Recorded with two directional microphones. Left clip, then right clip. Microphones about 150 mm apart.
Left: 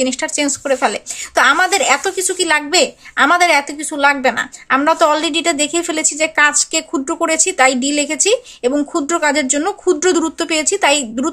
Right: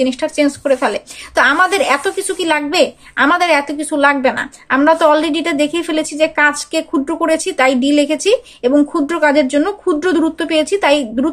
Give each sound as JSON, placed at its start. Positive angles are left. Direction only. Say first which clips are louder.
{"t": 0.0, "sound": "a woman's voice", "louder": "right 3 dB", "side_deg": 25}